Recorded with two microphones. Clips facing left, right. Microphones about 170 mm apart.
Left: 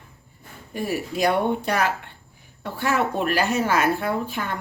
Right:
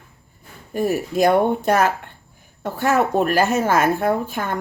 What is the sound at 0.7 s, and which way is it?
Speech, 45° right (ahead or behind).